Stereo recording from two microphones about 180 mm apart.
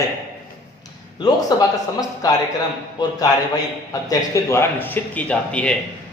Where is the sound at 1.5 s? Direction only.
20° left (ahead or behind).